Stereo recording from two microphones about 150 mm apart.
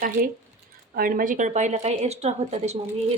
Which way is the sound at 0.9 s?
75° right (ahead or behind).